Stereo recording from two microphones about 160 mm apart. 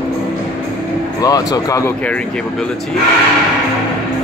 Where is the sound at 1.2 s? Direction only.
25° left (ahead or behind).